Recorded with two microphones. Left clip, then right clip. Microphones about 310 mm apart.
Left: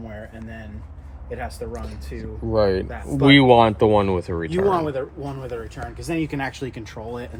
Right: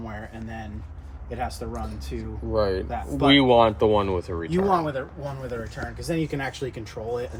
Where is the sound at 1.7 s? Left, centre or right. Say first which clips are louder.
Even; centre.